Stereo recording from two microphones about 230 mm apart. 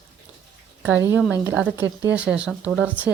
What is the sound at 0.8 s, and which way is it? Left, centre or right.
Speech, centre.